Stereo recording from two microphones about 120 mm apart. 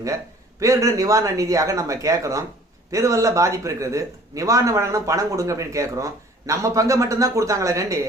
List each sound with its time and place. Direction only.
0.6 s speech: 25° right (ahead or behind)